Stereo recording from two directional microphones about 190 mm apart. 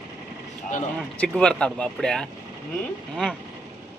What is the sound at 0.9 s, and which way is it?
Speech, 5° left (ahead or behind).